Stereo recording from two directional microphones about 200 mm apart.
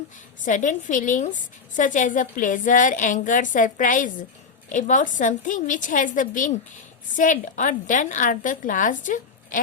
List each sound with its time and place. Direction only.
0.4 s a woman's voice: 40° left (ahead or behind)